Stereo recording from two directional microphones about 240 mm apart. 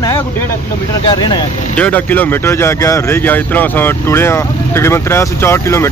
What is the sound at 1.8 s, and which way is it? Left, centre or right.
Speech, centre.